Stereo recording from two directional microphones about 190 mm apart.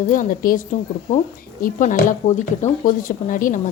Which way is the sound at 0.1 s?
45° left (ahead or behind).